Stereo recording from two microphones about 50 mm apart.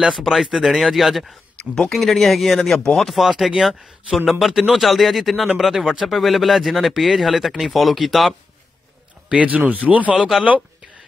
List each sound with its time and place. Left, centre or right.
0.1 s speech: centre
9.3 s speech: right